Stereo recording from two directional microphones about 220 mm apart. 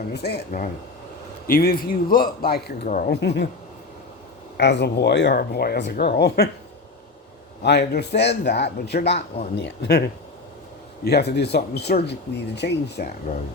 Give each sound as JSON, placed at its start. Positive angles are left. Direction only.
{"t": 0.1, "sound": "speech", "side_deg": 50}
{"t": 4.5, "sound": "speech", "side_deg": 50}
{"t": 7.6, "sound": "speech", "side_deg": 50}
{"t": 11.0, "sound": "speech", "side_deg": 50}